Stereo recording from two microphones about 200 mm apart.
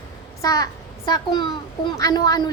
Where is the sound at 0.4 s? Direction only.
15° left (ahead or behind).